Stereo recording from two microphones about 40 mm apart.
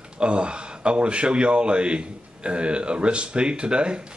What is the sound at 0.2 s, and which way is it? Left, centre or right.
A man's voice, right.